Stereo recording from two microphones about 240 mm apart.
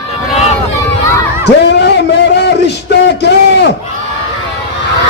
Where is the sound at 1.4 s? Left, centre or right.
Left.